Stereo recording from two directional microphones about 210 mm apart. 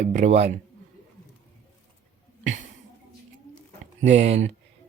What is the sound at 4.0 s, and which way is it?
Speech, 35° right (ahead or behind).